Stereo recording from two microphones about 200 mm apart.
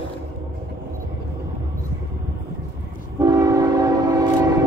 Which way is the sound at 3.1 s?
20° right (ahead or behind).